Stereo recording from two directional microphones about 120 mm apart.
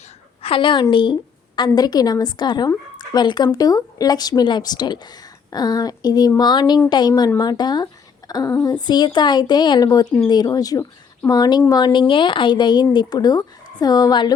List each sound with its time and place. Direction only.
0.4 s a woman's voice: 45° left (ahead or behind)